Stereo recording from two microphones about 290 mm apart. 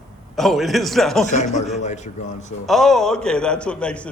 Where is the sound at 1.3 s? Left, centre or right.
Left.